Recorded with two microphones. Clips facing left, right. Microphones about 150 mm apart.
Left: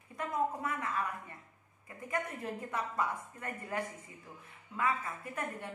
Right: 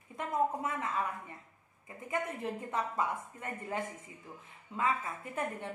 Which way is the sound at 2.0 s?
20° right (ahead or behind).